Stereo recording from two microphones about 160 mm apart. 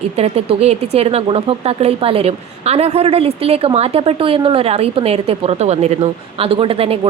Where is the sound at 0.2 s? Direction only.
40° right (ahead or behind).